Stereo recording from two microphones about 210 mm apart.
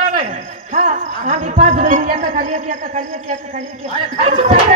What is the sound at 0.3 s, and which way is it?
A man's voice, 35° right (ahead or behind).